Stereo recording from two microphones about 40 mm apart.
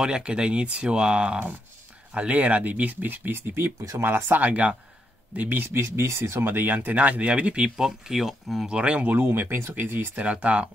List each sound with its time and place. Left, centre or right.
0.0 s speech: right
4.3 s speech: right
5.3 s speech: right
6.7 s speech: right
7.7 s speech: centre
8.6 s speech: right
9.2 s speech: right
10.1 s speech: right